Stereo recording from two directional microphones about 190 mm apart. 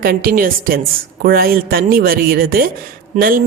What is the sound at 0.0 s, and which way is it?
A woman's voice, 50° right (ahead or behind).